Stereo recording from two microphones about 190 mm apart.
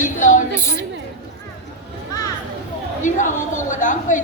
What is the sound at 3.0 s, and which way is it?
A woman's voice, 40° left (ahead or behind).